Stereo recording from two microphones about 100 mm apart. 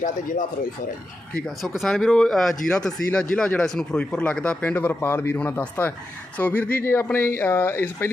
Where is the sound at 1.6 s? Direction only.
Centre (ahead or behind).